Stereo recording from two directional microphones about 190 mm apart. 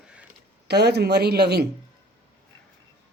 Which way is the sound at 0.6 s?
60° right (ahead or behind).